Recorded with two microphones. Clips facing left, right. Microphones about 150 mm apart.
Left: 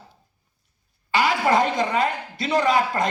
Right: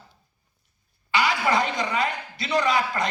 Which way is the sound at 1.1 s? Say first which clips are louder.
Left 3 dB; 45° left (ahead or behind).